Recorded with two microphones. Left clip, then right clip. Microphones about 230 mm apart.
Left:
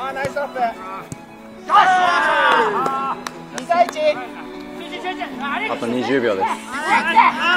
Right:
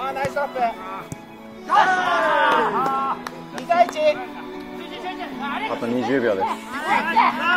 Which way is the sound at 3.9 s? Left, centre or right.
Right.